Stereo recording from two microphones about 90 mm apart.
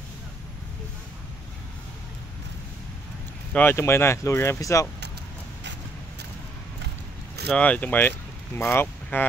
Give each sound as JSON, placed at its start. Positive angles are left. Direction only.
{"t": 3.5, "sound": "speech", "side_deg": 25}
{"t": 7.4, "sound": "speech", "side_deg": 15}
{"t": 8.5, "sound": "speech", "side_deg": 30}